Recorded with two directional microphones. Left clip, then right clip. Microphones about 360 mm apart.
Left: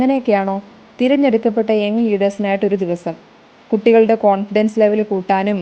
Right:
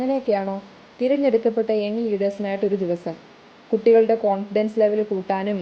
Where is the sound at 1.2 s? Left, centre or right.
Left.